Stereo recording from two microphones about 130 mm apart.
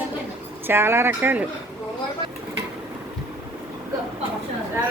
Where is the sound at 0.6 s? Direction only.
20° right (ahead or behind).